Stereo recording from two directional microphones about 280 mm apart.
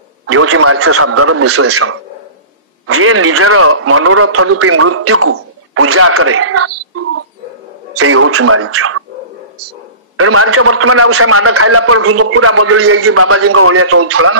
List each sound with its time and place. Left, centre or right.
0.3 s a man's voice: right
10.1 s a man's voice: right